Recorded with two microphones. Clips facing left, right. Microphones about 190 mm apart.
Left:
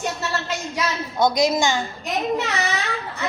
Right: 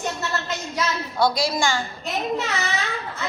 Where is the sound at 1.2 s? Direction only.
20° left (ahead or behind).